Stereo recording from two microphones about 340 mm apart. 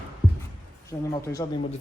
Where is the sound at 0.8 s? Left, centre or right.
Centre.